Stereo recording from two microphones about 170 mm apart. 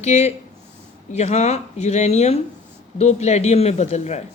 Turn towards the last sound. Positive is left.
turn(degrees=40)  # may be behind; listen again after turning